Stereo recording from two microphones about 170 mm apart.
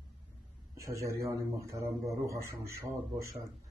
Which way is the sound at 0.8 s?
20° right (ahead or behind).